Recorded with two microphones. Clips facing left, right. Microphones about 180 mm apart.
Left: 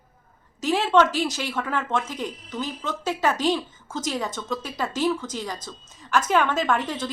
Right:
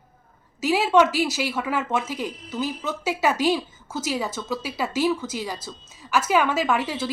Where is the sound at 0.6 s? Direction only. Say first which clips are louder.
Right 1 dB; 10° right (ahead or behind).